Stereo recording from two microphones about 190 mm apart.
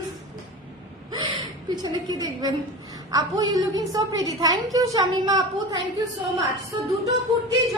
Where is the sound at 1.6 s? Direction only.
20° right (ahead or behind).